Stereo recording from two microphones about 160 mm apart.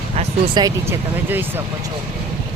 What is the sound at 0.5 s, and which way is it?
Speech, 20° right (ahead or behind).